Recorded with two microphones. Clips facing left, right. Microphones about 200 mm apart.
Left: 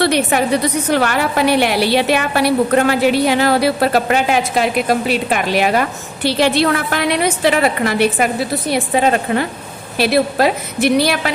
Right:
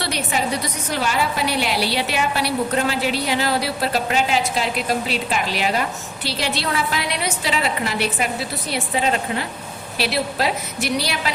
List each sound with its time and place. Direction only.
0.0 s a woman's voice: 60° left (ahead or behind)